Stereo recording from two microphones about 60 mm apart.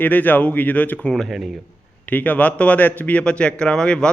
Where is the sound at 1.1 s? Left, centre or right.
Centre.